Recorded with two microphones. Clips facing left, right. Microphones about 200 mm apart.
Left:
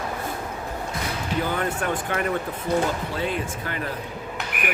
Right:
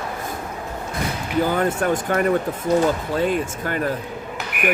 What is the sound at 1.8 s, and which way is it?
Speech, 40° right (ahead or behind).